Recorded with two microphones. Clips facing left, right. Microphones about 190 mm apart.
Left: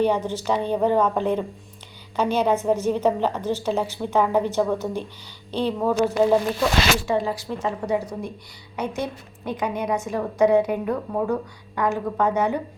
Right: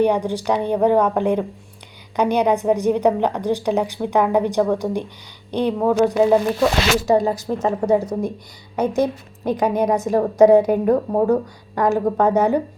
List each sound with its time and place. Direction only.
0.0 s a woman's voice: 15° right (ahead or behind)
7.1 s a woman's voice: 40° right (ahead or behind)